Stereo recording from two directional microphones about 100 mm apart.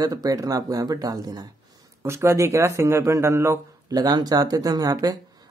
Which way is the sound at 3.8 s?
40° right (ahead or behind).